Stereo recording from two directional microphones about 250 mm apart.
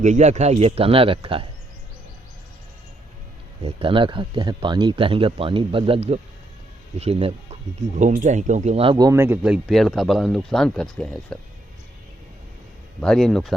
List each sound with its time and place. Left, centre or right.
0.0 s speech: right
3.6 s speech: right; by 11.3 s centre
13.0 s speech: centre